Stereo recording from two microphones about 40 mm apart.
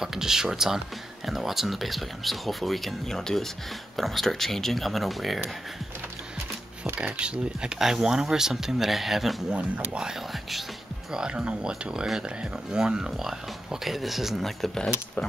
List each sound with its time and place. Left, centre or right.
0.0 s speech: centre
7.2 s speech: right
7.8 s speech: centre
9.5 s speech: right; by 14.4 s centre